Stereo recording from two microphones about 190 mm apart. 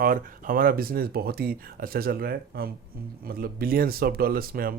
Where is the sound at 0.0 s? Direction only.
45° right (ahead or behind).